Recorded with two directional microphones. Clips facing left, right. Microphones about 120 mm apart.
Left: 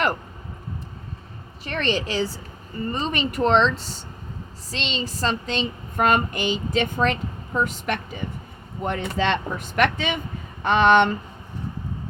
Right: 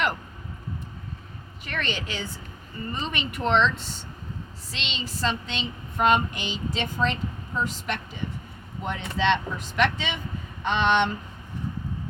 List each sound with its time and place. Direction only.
1.6 s a woman's voice: 35° left (ahead or behind); by 11.1 s 50° left (ahead or behind)